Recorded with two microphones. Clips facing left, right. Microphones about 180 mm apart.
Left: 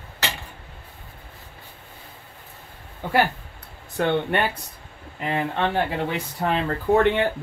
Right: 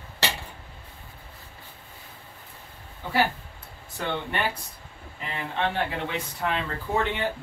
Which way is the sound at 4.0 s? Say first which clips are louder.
Left 8 dB; 65° left (ahead or behind).